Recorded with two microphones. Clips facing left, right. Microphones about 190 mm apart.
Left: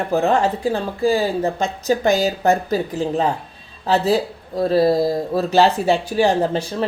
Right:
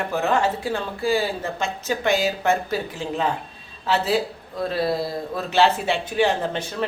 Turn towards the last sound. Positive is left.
turn(degrees=35)  # may be behind; listen again after turning